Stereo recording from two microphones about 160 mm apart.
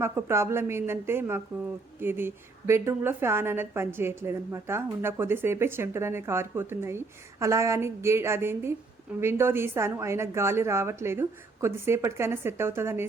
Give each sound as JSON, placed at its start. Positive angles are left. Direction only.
{"t": 0.0, "sound": "a woman's voice", "side_deg": -15}